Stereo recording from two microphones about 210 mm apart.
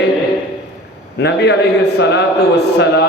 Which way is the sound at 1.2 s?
55° left (ahead or behind).